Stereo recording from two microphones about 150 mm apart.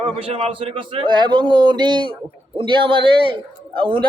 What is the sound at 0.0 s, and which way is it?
Speech, 40° right (ahead or behind).